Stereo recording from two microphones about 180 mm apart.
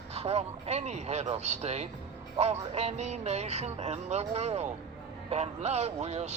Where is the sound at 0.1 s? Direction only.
35° right (ahead or behind).